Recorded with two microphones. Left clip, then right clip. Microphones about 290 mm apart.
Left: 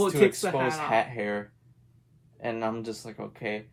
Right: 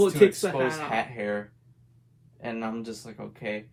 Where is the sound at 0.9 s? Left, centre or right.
Left.